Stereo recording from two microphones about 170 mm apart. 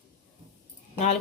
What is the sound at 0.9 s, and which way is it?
Speech, 40° left (ahead or behind).